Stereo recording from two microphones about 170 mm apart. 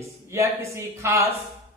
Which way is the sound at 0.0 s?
15° right (ahead or behind).